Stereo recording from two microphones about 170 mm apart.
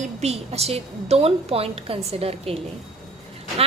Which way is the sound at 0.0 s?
40° right (ahead or behind).